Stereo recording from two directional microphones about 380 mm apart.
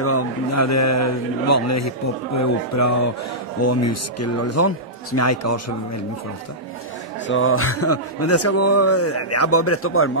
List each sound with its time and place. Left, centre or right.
0.0 s a man's voice: left
7.2 s a man's voice: left